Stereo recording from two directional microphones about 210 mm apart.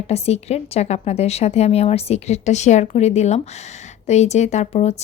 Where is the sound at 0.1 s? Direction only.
30° left (ahead or behind).